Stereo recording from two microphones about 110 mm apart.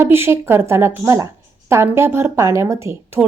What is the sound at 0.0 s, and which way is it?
A woman's voice, 20° right (ahead or behind).